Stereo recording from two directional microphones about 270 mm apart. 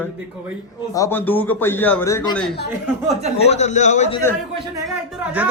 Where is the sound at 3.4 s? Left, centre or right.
Left.